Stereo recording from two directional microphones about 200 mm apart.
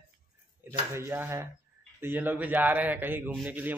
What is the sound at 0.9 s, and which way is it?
Speech, 10° right (ahead or behind).